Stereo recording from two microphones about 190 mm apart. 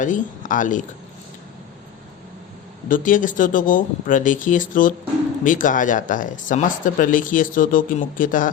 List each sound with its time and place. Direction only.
0.0 s speech: 45° left (ahead or behind)
2.9 s speech: 45° left (ahead or behind)